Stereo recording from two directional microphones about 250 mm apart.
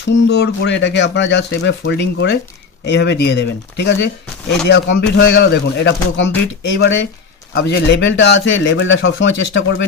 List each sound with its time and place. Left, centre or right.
0.1 s speech: left